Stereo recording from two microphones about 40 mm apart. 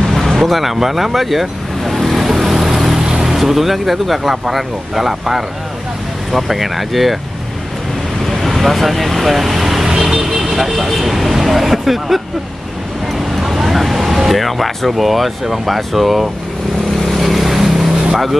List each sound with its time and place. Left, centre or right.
0.2 s vehicle: centre
3.0 s vehicle: centre
3.3 s speech: centre
8.3 s vehicle: centre
13.4 s speech: centre
17.0 s boat: centre